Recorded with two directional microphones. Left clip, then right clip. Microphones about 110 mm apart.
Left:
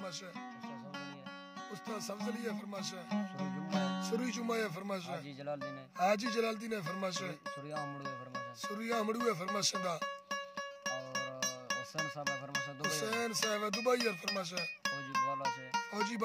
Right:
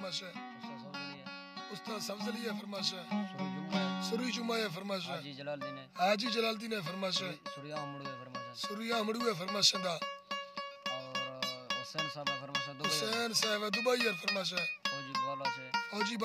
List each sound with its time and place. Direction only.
1.9 s music: 20° right (ahead or behind)
3.1 s music: 40° left (ahead or behind)
4.0 s speech: 15° right (ahead or behind)
8.6 s speech: 15° right (ahead or behind)
10.6 s music: 40° left (ahead or behind)
12.9 s speech: 15° right (ahead or behind)
13.7 s music: 20° right (ahead or behind)
14.8 s music: 40° left (ahead or behind)
15.9 s music: 20° right (ahead or behind)